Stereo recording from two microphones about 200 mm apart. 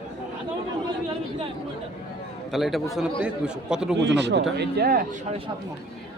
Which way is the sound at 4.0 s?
60° right (ahead or behind).